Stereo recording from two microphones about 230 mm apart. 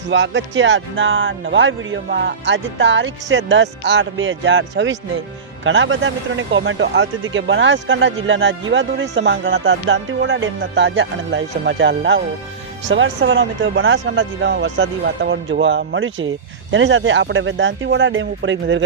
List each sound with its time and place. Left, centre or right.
0.1 s a man's voice: right